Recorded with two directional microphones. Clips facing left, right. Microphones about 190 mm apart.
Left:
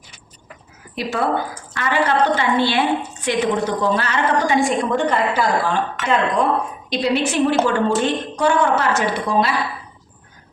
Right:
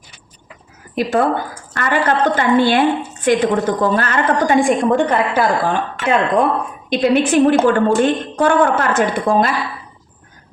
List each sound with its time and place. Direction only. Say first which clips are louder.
0.9 s a woman's voice: right 5 dB; 50° right (ahead or behind)